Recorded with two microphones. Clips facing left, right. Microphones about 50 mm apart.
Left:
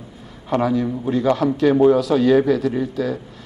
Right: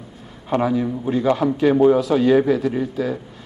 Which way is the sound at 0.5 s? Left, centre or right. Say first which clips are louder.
Even; right.